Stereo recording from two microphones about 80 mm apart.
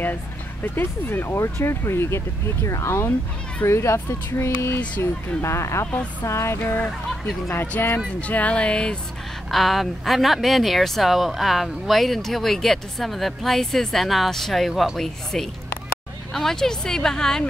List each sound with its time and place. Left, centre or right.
0.7 s speech: left; by 8.9 s centre
9.5 s speech: centre